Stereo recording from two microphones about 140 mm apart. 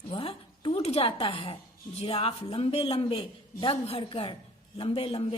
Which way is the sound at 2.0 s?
40° left (ahead or behind).